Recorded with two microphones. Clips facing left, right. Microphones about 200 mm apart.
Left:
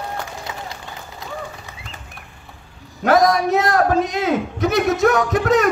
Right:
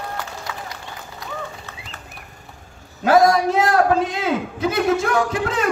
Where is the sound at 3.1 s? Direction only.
30° right (ahead or behind).